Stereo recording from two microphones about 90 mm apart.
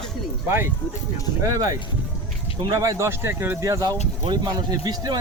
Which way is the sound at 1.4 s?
40° right (ahead or behind).